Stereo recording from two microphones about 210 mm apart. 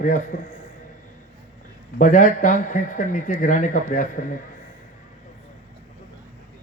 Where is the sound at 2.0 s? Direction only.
40° left (ahead or behind).